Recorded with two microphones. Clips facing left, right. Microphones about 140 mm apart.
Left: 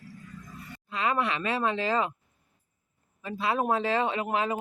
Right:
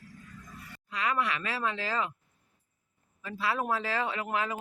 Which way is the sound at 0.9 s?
25° left (ahead or behind).